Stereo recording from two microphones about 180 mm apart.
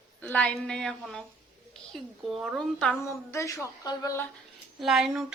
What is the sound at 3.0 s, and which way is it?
Speech, 15° left (ahead or behind).